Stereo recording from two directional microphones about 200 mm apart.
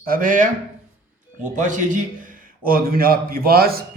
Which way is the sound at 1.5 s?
40° right (ahead or behind).